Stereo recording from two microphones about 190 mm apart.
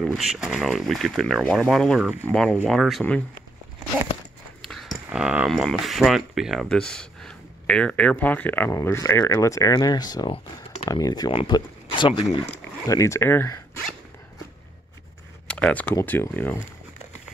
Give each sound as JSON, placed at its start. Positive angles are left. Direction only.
{"t": 0.0, "sound": "speech", "side_deg": -5}
{"t": 4.6, "sound": "speech", "side_deg": 0}
{"t": 15.4, "sound": "speech", "side_deg": 5}